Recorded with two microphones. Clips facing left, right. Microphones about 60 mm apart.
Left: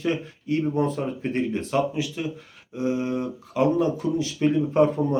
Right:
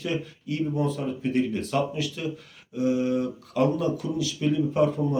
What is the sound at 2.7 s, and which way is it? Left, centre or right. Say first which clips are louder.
Speech: right 1 dB; left.